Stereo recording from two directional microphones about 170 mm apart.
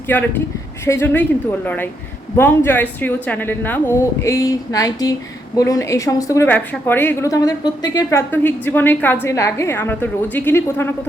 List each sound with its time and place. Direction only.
0.1 s a woman's voice: 10° left (ahead or behind)
8.3 s a woman's voice: 10° left (ahead or behind)